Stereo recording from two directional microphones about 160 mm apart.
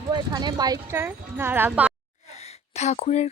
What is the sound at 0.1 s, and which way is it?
Speech, 25° right (ahead or behind).